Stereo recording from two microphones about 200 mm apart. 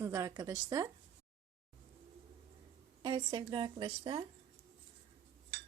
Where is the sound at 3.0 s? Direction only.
25° right (ahead or behind).